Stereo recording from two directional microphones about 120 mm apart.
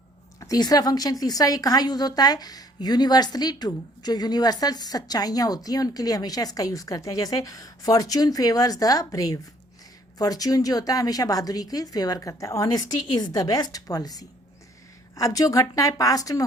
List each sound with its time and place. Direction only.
0.3 s a woman's voice: 30° left (ahead or behind)